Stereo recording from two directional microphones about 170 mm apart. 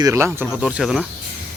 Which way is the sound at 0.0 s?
15° right (ahead or behind).